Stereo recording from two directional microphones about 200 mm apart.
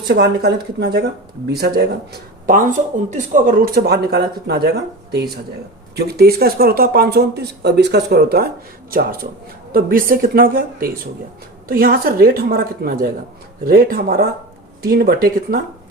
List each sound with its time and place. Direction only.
0.1 s speech: 55° right (ahead or behind)
2.5 s speech: 40° right (ahead or behind)